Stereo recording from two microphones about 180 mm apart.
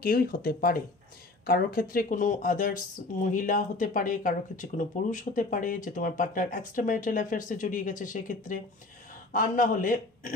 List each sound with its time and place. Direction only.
0.0 s speech: 55° left (ahead or behind)